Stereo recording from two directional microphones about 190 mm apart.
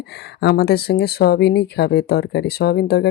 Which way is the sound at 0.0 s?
60° left (ahead or behind).